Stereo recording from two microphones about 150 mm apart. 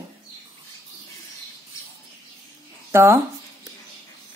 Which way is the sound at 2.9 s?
15° right (ahead or behind).